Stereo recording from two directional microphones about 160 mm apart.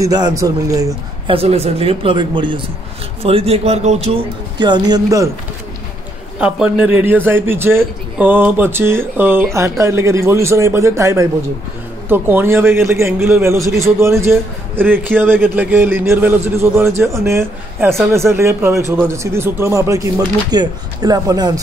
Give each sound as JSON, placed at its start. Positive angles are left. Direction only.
{"t": 0.0, "sound": "a man's voice", "side_deg": -20}
{"t": 1.3, "sound": "speech", "side_deg": -40}
{"t": 6.4, "sound": "a man's voice", "side_deg": -10}